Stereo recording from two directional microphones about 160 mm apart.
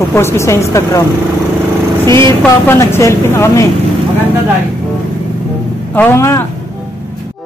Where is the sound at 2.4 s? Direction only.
15° left (ahead or behind).